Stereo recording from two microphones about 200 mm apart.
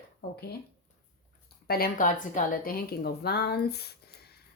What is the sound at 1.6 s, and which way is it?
Speech, 50° left (ahead or behind).